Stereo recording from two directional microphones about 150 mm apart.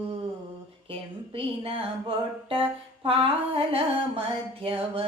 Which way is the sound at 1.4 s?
40° right (ahead or behind).